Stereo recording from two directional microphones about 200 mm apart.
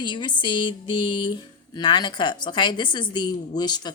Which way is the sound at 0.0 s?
20° left (ahead or behind).